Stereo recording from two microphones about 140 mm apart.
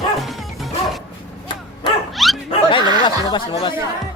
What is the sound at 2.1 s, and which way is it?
Dog, centre (ahead or behind).